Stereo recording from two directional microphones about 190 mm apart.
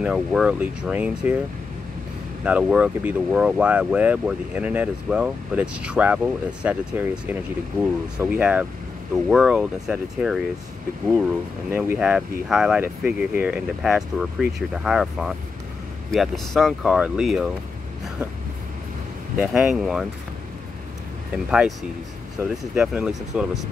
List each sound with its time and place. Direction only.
0.0 s speech: 5° right (ahead or behind)
2.4 s speech: 5° right (ahead or behind)
11.7 s speech: 10° right (ahead or behind)
19.4 s speech: 5° right (ahead or behind)
21.5 s speech: 5° right (ahead or behind)